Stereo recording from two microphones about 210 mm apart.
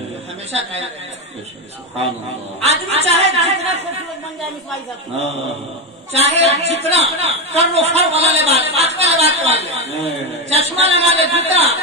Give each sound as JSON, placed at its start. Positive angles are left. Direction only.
{"t": 0.5, "sound": "a man's voice", "side_deg": -30}
{"t": 2.6, "sound": "a woman's voice", "side_deg": -30}
{"t": 6.1, "sound": "a man's voice", "side_deg": -30}